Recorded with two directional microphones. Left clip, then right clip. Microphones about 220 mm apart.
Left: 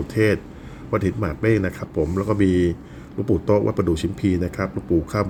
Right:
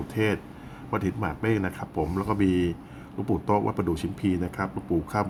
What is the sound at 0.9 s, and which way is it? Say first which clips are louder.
Speech: left 6 dB; 5° left (ahead or behind).